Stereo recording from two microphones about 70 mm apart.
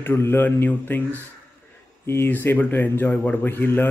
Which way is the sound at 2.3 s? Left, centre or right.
Left.